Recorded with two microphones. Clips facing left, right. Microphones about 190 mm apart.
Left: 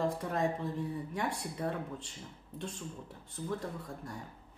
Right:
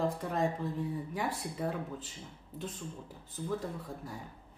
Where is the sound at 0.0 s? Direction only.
Centre (ahead or behind).